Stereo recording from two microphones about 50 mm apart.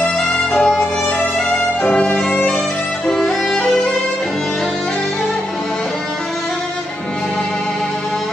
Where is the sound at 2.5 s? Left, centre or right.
Centre.